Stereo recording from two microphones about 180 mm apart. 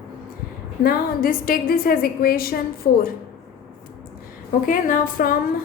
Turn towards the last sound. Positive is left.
turn(degrees=50)  # may be behind; listen again after turning